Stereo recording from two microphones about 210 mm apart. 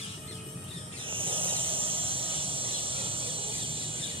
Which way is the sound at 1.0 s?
25° right (ahead or behind).